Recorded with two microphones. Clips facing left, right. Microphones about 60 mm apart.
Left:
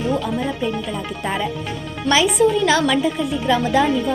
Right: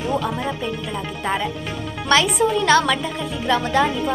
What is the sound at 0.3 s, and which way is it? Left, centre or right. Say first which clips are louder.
Speech: left 3 dB; centre.